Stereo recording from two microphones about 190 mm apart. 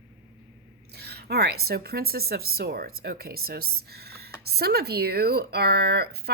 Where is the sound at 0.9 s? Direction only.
60° right (ahead or behind).